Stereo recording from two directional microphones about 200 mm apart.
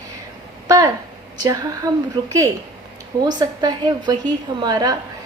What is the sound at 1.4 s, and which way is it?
Speech, 20° right (ahead or behind).